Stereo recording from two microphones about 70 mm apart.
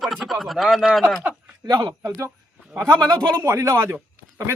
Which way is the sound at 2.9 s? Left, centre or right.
Right.